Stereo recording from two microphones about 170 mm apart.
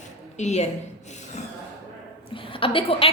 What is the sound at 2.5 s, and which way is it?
Speech, 30° left (ahead or behind).